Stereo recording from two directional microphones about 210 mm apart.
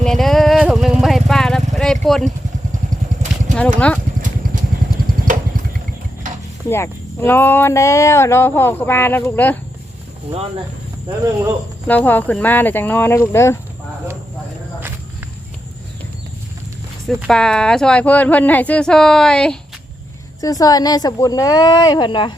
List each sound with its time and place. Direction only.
0.0 s vehicle: centre (ahead or behind)
3.8 s speech: 5° left (ahead or behind)
6.7 s speech: 10° left (ahead or behind)
11.9 s speech: 10° left (ahead or behind)
17.1 s speech: centre (ahead or behind)
20.4 s speech: 15° left (ahead or behind)